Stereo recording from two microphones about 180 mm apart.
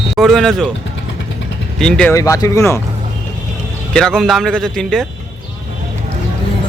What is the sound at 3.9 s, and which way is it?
A man's voice, 5° left (ahead or behind).